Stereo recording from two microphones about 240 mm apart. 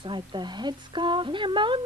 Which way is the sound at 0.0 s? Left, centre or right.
Centre.